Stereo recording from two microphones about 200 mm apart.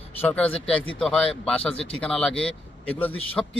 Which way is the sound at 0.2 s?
10° left (ahead or behind).